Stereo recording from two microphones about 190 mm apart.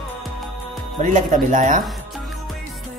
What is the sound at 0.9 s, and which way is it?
Speech, 40° right (ahead or behind).